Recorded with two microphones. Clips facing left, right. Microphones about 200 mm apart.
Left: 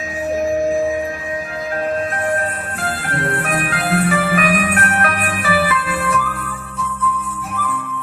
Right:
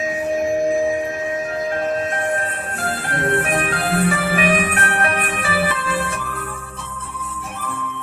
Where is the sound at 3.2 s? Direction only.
30° right (ahead or behind).